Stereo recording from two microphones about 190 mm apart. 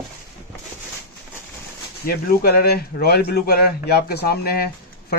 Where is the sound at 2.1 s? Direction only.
55° left (ahead or behind).